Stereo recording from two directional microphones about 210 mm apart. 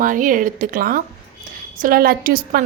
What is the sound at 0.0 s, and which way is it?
A woman's voice, 40° right (ahead or behind).